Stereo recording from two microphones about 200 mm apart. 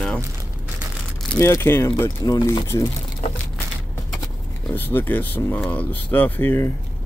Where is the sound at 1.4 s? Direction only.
15° left (ahead or behind).